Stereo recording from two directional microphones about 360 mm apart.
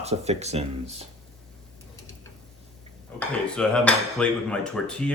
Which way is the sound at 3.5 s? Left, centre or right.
Centre.